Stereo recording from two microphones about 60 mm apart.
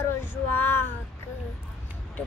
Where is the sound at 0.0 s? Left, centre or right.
Left.